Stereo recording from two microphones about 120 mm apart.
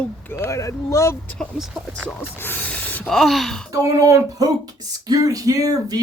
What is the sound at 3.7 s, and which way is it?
Speech, 25° right (ahead or behind).